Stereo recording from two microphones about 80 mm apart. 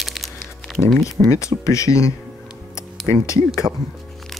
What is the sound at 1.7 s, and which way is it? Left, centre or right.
Speech, left.